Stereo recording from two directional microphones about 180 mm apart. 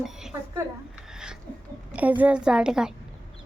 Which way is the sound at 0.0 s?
5° right (ahead or behind).